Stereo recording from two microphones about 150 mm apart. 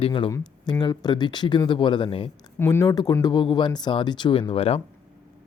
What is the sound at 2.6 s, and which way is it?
Speech, 20° left (ahead or behind).